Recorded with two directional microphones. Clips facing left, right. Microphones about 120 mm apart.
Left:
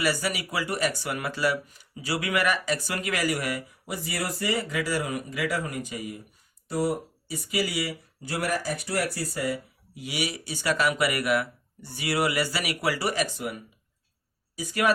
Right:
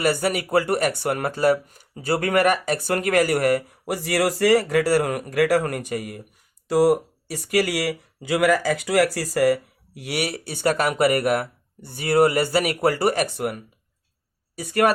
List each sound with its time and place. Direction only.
0.0 s speech: 50° right (ahead or behind)
6.7 s speech: 85° right
8.4 s speech: 90° right; by 14.9 s 55° right (ahead or behind)